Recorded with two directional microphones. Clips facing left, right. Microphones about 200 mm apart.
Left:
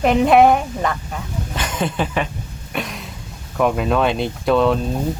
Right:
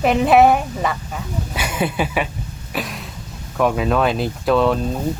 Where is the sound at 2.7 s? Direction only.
Centre (ahead or behind).